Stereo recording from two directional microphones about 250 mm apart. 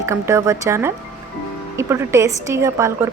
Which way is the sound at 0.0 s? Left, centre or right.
Centre.